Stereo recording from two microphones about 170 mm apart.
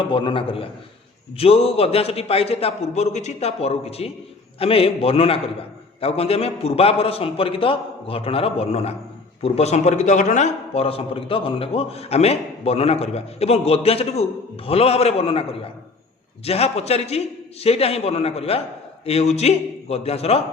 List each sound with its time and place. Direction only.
0.1 s a man's voice: 30° left (ahead or behind)